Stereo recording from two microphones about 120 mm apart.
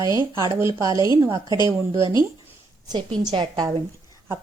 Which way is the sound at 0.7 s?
30° right (ahead or behind).